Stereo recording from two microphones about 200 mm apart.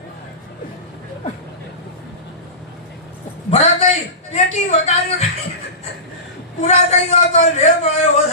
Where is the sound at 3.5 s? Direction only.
35° left (ahead or behind).